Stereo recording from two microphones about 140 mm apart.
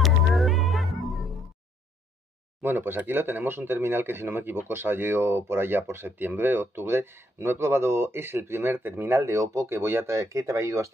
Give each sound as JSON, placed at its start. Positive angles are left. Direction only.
{"t": 0.0, "sound": "music", "side_deg": 0}
{"t": 2.6, "sound": "speech", "side_deg": -15}